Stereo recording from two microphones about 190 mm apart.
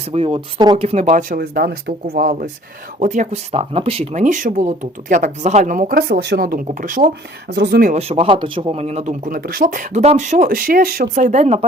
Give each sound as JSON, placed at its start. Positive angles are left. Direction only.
{"t": 0.1, "sound": "speech", "side_deg": -30}
{"t": 7.5, "sound": "speech", "side_deg": -60}